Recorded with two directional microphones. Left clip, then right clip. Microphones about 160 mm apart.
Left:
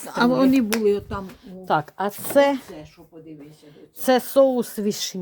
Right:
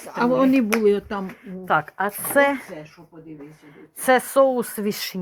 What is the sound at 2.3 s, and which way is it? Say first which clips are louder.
Speech: left 1 dB; 35° left (ahead or behind).